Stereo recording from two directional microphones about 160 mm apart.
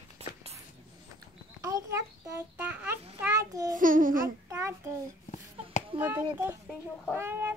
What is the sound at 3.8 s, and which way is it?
Babbling, 55° right (ahead or behind).